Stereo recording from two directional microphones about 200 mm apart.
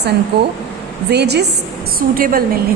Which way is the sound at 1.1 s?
55° right (ahead or behind).